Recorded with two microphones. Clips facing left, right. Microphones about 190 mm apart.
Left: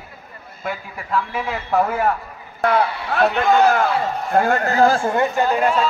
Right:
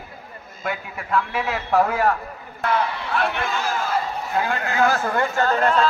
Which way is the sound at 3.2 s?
60° left (ahead or behind).